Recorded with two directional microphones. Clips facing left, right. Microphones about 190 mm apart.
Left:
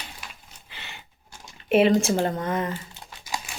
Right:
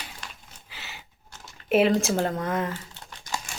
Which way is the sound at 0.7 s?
5° right (ahead or behind).